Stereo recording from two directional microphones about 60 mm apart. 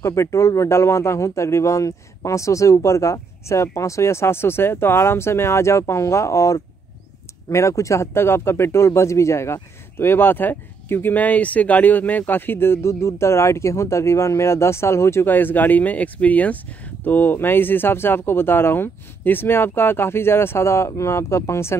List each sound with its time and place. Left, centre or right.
0.0 s speech: left
15.2 s speech: left